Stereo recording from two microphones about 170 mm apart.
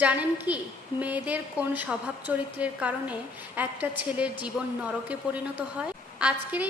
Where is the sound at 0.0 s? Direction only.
10° right (ahead or behind).